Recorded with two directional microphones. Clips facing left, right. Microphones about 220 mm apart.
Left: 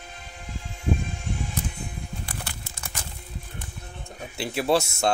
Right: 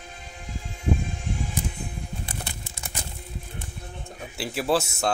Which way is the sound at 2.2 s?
20° right (ahead or behind).